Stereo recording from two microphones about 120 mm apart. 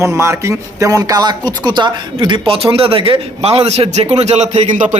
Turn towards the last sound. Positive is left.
turn(degrees=-80)